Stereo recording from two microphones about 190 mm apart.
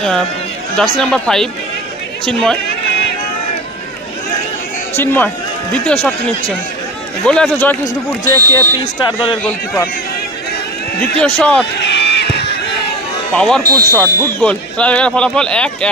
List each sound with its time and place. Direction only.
0.8 s speech: 5° left (ahead or behind)
4.9 s speech: 10° left (ahead or behind)
8.2 s speech: 15° left (ahead or behind)
9.4 s speech: 10° left (ahead or behind)
11.0 s speech: 5° left (ahead or behind)
11.8 s a sound: 65° left (ahead or behind)
13.3 s speech: 5° left (ahead or behind)